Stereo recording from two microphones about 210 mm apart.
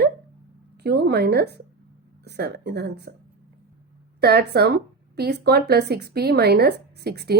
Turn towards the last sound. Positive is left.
turn(degrees=-50)  # may be behind; listen again after turning